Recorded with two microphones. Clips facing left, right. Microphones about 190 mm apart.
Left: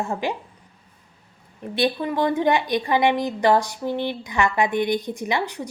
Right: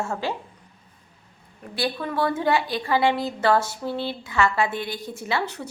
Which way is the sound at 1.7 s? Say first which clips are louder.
Left 4 dB; 20° left (ahead or behind).